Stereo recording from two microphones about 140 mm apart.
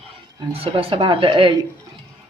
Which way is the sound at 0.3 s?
40° right (ahead or behind).